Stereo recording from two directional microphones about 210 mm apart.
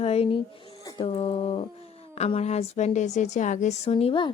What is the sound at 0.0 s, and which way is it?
A woman's voice, 30° left (ahead or behind).